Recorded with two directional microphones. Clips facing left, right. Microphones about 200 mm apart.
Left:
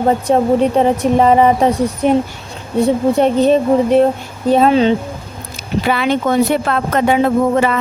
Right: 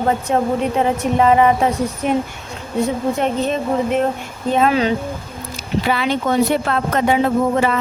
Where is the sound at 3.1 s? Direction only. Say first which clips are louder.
Left 8 dB; 35° left (ahead or behind).